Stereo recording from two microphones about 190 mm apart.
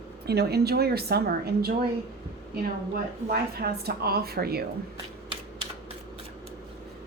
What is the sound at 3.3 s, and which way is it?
A woman's voice, 55° right (ahead or behind).